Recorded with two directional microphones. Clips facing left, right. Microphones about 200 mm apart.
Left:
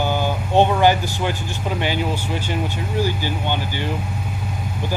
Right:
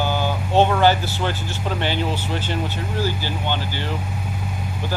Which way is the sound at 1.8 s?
10° left (ahead or behind).